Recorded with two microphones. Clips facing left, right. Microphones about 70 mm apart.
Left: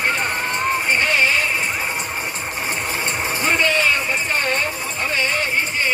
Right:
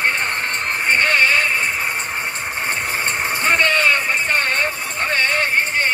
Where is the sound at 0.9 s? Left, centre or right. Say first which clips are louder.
Right 5 dB; right.